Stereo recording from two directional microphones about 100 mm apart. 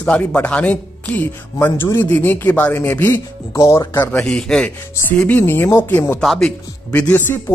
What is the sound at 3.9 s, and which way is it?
Speech, 20° left (ahead or behind).